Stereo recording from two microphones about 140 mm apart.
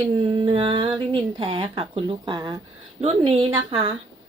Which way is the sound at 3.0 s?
45° right (ahead or behind).